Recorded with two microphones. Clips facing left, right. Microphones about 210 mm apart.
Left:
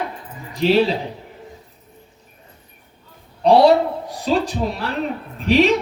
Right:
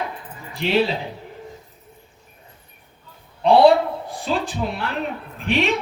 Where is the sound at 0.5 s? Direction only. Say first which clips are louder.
Left 5 dB; 40° left (ahead or behind).